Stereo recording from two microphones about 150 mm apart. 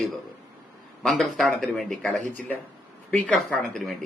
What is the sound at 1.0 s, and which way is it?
Speech, centre (ahead or behind).